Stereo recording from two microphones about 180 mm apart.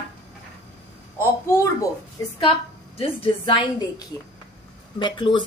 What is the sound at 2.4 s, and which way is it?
A woman's voice, 30° left (ahead or behind).